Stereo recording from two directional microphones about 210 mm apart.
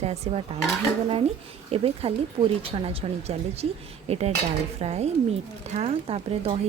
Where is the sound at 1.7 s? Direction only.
25° right (ahead or behind).